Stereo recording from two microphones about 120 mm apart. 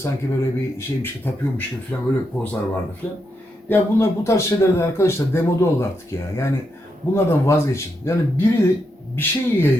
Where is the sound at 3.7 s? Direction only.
20° left (ahead or behind).